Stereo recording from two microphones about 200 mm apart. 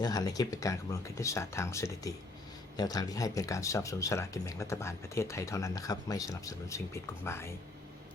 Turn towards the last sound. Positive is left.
turn(degrees=15)  # may be behind; listen again after turning